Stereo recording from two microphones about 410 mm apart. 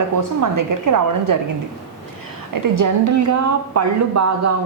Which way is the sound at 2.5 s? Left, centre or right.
Right.